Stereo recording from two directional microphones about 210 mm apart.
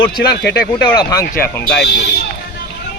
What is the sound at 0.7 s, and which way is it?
Speech, 20° left (ahead or behind).